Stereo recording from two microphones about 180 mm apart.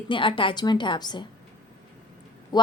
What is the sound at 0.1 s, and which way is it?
A woman's voice, 30° left (ahead or behind).